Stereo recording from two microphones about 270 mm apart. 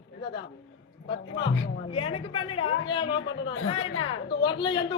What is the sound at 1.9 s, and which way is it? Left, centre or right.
A woman's voice, left.